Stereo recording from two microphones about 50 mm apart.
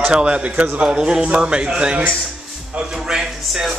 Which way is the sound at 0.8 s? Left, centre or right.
Centre.